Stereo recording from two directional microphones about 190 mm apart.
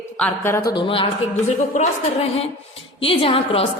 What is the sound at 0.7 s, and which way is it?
A woman's voice, 25° left (ahead or behind).